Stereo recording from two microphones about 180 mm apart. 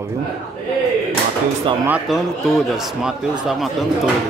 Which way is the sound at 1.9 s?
Centre (ahead or behind).